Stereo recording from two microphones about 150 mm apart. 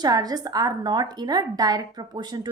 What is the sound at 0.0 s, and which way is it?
A woman's voice, 25° right (ahead or behind).